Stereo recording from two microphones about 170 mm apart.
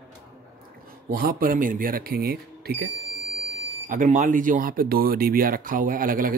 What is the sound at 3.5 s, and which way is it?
Speech, 45° right (ahead or behind).